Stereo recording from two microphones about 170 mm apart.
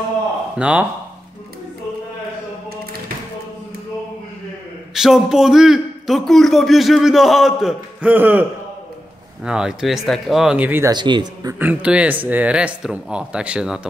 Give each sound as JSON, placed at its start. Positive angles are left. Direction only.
{"t": 0.6, "sound": "speech", "side_deg": -5}
{"t": 4.9, "sound": "a man's voice", "side_deg": -5}
{"t": 10.9, "sound": "speech", "side_deg": -25}
{"t": 11.5, "sound": "speech", "side_deg": -10}